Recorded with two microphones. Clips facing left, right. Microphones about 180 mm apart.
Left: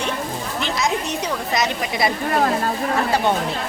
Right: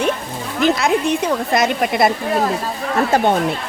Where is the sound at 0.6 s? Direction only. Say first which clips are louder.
Right 8 dB; 55° right (ahead or behind).